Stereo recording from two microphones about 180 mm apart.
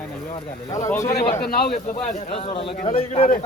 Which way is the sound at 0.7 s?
15° left (ahead or behind).